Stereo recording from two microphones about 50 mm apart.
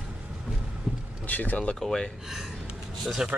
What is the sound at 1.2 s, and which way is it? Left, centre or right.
Speech, left.